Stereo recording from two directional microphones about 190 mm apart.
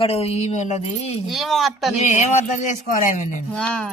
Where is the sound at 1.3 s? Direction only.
Centre (ahead or behind).